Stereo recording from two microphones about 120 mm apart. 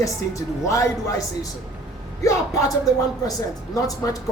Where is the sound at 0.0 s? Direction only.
25° left (ahead or behind).